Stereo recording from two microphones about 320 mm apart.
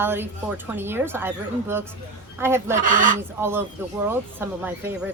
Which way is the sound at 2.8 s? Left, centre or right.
Right.